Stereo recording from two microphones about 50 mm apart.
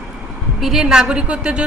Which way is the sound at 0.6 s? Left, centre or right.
Centre.